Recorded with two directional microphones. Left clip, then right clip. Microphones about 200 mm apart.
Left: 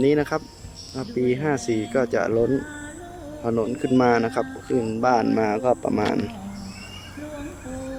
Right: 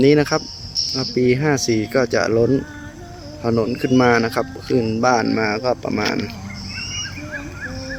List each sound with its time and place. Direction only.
0.0 s speech: centre (ahead or behind)